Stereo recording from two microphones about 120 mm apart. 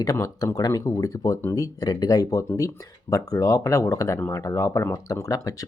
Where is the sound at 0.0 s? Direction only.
30° left (ahead or behind).